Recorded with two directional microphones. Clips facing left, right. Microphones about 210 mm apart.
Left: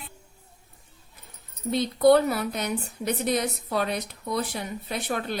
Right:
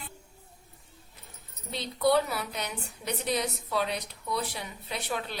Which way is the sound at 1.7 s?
50° left (ahead or behind).